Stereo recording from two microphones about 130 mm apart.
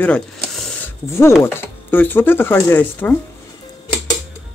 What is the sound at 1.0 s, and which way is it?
Chopping, 20° left (ahead or behind).